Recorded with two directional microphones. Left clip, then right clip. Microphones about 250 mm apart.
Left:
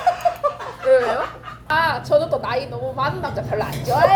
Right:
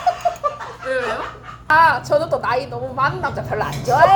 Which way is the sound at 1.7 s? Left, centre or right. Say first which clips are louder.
Right 4 dB; right.